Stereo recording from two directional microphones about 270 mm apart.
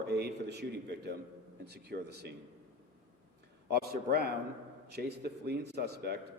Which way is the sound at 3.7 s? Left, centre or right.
Right.